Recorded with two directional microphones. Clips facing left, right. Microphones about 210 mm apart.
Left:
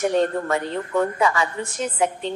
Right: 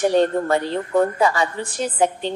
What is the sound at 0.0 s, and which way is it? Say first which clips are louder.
A woman's voice: right 3 dB; 30° right (ahead or behind).